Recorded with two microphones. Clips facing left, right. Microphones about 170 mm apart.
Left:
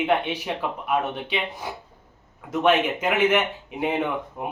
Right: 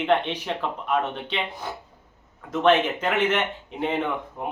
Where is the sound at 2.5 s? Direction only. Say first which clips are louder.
Right 1 dB; 10° left (ahead or behind).